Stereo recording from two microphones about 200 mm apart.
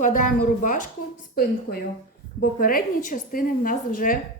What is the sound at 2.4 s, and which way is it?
A woman's voice, 45° left (ahead or behind).